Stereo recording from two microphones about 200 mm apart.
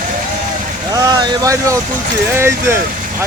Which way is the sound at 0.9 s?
15° right (ahead or behind).